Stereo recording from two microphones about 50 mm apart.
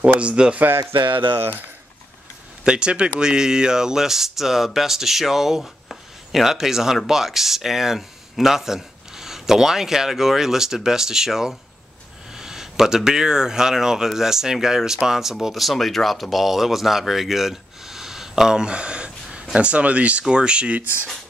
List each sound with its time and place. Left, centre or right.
0.0 s speech: right
2.6 s speech: centre